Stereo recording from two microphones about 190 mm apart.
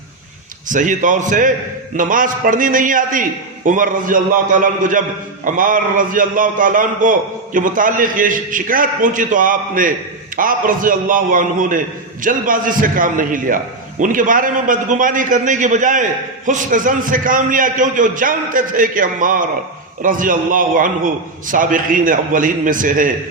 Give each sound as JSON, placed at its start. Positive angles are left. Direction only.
{"t": 0.7, "sound": "a man's voice", "side_deg": -40}